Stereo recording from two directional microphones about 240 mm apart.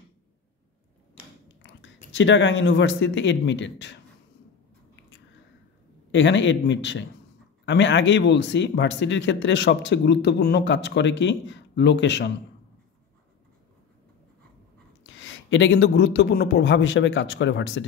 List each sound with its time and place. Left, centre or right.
2.1 s a man's voice: left
6.1 s a man's voice: left
15.0 s a man's voice: left